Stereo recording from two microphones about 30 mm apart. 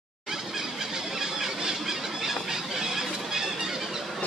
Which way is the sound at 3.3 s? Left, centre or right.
Centre.